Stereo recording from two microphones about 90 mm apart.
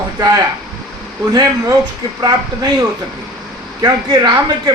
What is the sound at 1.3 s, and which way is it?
Speech, 45° right (ahead or behind).